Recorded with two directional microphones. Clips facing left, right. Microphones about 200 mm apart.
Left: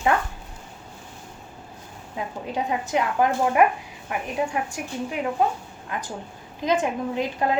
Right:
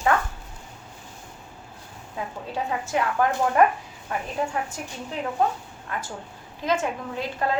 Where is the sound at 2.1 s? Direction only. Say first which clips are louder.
Left 2 dB; 15° left (ahead or behind).